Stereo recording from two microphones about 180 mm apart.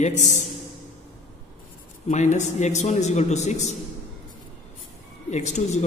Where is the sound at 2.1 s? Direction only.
40° left (ahead or behind).